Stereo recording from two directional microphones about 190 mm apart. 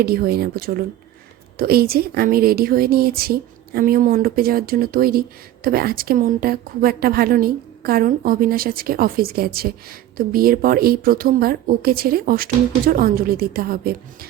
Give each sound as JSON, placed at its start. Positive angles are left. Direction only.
{"t": 0.0, "sound": "a woman's voice", "side_deg": -55}